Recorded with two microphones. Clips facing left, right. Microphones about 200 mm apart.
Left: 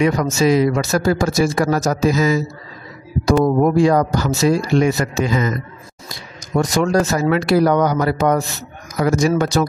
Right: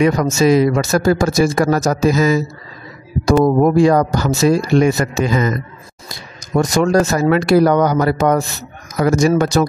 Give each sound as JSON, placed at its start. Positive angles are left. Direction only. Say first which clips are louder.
{"t": 0.0, "sound": "speech", "louder": "right 2 dB", "side_deg": -45}
{"t": 6.5, "sound": "speech", "louder": "right 3 dB", "side_deg": -45}